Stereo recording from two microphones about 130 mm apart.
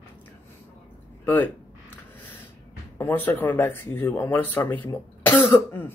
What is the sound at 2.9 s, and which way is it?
Speech, 15° left (ahead or behind).